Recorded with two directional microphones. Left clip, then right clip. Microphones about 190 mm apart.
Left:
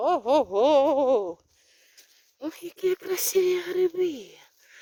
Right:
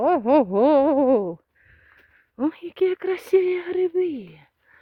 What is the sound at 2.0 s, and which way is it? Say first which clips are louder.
Speech: right 11 dB; 5° right (ahead or behind).